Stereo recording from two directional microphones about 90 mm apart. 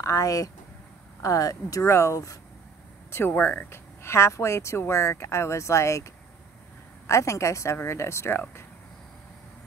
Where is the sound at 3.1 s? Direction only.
25° left (ahead or behind).